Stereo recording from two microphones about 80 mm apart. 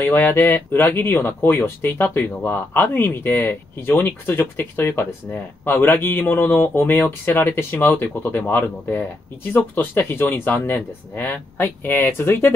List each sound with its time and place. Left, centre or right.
0.0 s speech: left